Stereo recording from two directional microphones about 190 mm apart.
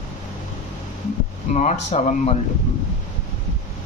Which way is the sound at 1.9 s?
35° left (ahead or behind).